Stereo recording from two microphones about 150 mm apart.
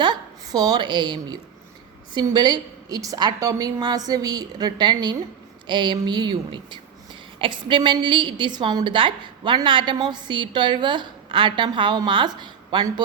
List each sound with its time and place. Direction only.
0.0 s a woman's voice: 30° right (ahead or behind)